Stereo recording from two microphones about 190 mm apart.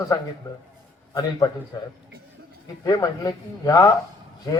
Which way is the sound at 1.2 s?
20° left (ahead or behind).